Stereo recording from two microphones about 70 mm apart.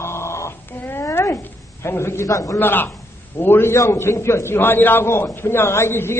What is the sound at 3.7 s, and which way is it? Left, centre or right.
A woman's voice, left.